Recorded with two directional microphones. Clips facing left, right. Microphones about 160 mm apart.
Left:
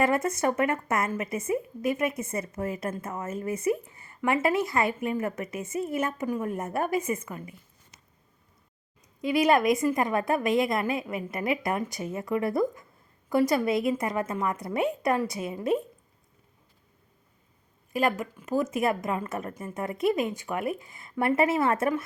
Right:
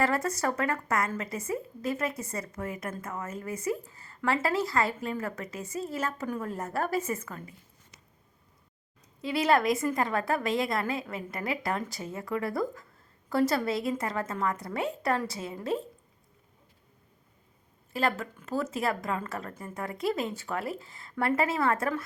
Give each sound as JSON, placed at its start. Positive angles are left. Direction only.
{"t": 0.0, "sound": "a woman's voice", "side_deg": 20}
{"t": 9.2, "sound": "a woman's voice", "side_deg": 15}
{"t": 17.9, "sound": "a woman's voice", "side_deg": 15}